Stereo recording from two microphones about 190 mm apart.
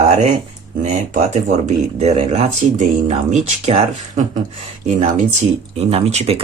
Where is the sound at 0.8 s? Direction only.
40° right (ahead or behind).